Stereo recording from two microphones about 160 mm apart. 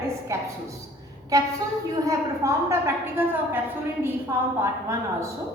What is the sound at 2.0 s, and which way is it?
A woman's voice, 20° right (ahead or behind).